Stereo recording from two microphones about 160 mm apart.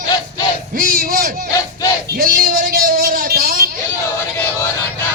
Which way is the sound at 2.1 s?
65° right (ahead or behind).